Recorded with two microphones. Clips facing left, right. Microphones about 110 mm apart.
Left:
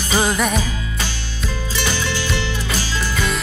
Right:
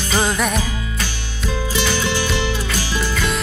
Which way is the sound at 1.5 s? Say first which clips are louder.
Right 3 dB; 15° right (ahead or behind).